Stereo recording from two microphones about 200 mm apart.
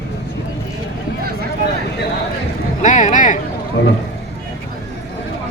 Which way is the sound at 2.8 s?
40° left (ahead or behind).